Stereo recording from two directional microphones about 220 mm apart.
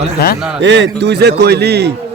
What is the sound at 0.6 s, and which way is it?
A man's voice, 55° right (ahead or behind).